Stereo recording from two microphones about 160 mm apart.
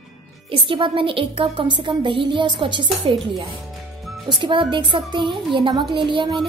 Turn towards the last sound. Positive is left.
turn(degrees=-30)  # may be behind; listen again after turning